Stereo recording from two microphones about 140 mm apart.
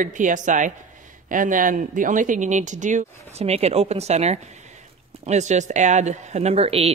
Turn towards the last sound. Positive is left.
turn(degrees=-45)  # may be behind; listen again after turning